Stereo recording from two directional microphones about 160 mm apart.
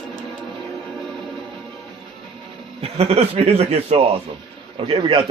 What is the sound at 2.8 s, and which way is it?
A man's voice, 40° right (ahead or behind).